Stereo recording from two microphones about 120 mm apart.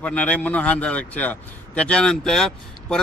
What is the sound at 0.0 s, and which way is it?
Speech, 10° left (ahead or behind).